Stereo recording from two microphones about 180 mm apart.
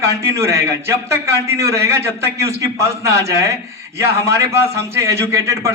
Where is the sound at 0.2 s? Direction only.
15° right (ahead or behind).